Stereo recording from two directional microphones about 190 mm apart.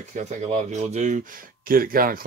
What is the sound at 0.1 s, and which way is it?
Speech, 40° right (ahead or behind).